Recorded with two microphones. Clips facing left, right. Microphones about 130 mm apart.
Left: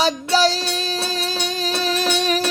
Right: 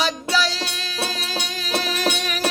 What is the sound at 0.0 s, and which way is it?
Music, 35° left (ahead or behind).